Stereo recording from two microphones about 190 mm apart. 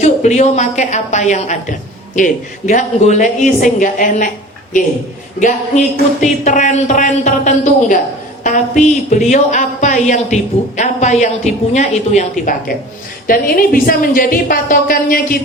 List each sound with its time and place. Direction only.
0.0 s a woman's voice: 40° left (ahead or behind)
5.4 s a woman's voice: 40° left (ahead or behind)